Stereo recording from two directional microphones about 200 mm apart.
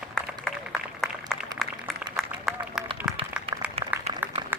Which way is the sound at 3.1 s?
5° right (ahead or behind).